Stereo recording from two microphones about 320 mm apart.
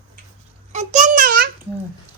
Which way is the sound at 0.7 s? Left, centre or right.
Right.